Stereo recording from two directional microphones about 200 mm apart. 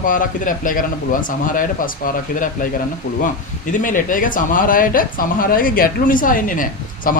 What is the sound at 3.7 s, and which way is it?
Speech, 40° left (ahead or behind).